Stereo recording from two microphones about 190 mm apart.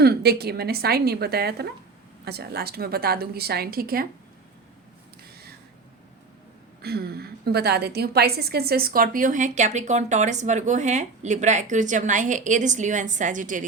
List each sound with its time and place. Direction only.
0.0 s a woman's voice: 55° right (ahead or behind)
6.8 s a woman's voice: 55° right (ahead or behind)